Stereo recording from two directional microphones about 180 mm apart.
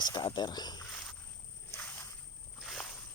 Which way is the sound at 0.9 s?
Centre (ahead or behind).